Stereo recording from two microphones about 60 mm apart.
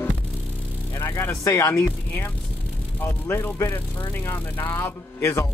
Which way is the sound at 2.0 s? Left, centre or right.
Left.